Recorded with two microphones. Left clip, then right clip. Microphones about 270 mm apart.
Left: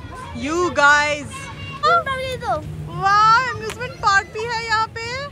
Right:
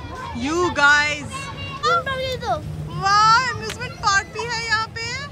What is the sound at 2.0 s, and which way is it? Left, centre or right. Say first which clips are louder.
Children playing: left 1 dB; left.